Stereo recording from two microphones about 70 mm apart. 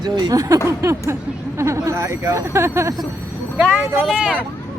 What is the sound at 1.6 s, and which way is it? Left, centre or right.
Speech, right.